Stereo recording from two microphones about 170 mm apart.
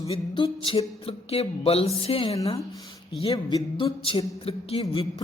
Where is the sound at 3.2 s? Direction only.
30° left (ahead or behind).